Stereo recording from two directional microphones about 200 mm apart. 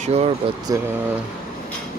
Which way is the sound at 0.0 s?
30° right (ahead or behind).